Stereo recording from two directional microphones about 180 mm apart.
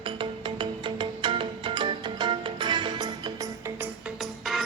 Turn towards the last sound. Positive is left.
turn(degrees=0)  # may be behind; listen again after turning